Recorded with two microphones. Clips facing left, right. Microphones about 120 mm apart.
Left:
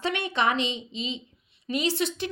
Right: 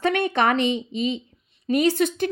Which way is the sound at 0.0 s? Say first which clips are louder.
Right 5 dB; 50° right (ahead or behind).